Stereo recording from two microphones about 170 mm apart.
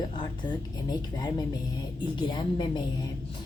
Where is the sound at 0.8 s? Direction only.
25° left (ahead or behind).